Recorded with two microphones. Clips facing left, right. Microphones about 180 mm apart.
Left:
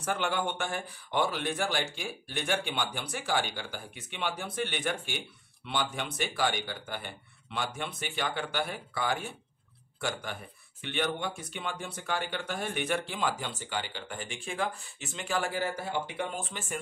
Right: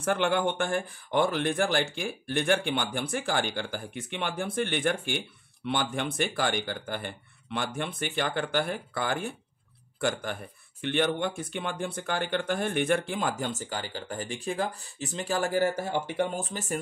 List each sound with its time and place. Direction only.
0.0 s speech: 55° right (ahead or behind); by 16.8 s 40° right (ahead or behind)